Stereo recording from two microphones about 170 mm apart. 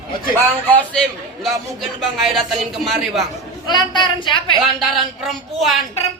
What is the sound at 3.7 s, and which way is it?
Speech, 25° left (ahead or behind).